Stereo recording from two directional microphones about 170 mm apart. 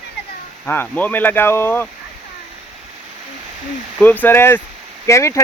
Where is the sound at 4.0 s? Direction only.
10° left (ahead or behind).